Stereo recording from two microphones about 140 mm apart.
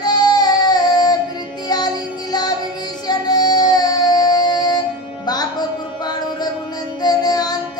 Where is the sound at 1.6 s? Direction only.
30° left (ahead or behind).